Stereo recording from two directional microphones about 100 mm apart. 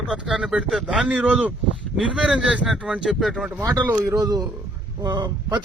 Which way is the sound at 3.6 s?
35° right (ahead or behind).